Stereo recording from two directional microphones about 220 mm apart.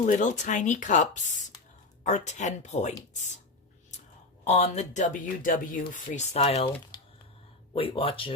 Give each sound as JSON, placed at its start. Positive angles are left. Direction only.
{"t": 0.0, "sound": "speech", "side_deg": 35}
{"t": 4.4, "sound": "speech", "side_deg": 30}
{"t": 6.9, "sound": "a sound", "side_deg": 20}
{"t": 7.7, "sound": "speech", "side_deg": 25}